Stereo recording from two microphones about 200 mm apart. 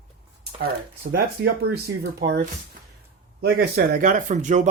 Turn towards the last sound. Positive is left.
turn(degrees=-40)  # may be behind; listen again after turning